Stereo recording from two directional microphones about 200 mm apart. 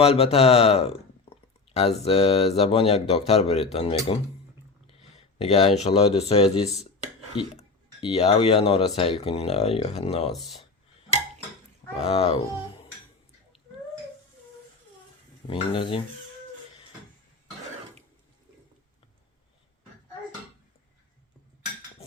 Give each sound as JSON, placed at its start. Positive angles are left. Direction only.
{"t": 0.0, "sound": "speech", "side_deg": 30}
{"t": 8.0, "sound": "speech", "side_deg": 30}
{"t": 11.9, "sound": "speech", "side_deg": 30}
{"t": 15.4, "sound": "speech", "side_deg": 25}